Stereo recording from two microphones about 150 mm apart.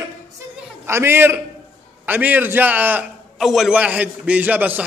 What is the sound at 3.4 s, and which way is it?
A man's voice, centre (ahead or behind).